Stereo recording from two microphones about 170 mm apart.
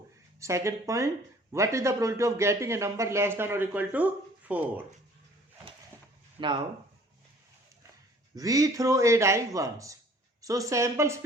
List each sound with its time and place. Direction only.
0.3 s a man's voice: 15° right (ahead or behind)
8.4 s a man's voice: 20° right (ahead or behind)